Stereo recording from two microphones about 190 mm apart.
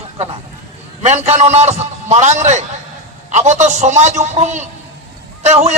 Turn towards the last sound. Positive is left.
turn(degrees=-35)  # may be behind; listen again after turning